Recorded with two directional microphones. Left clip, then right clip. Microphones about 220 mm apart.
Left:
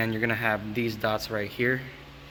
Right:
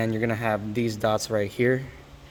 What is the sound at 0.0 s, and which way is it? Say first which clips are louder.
Speech: even; 40° right (ahead or behind).